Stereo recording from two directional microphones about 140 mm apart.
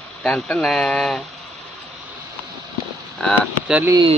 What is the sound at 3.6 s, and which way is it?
Speech, 10° right (ahead or behind).